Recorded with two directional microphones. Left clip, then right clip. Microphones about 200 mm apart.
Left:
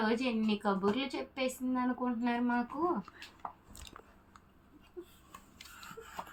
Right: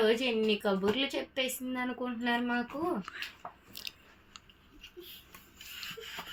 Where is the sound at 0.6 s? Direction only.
55° right (ahead or behind).